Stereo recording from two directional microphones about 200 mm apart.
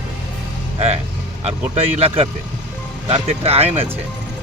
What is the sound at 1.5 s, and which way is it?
Speech, 30° right (ahead or behind).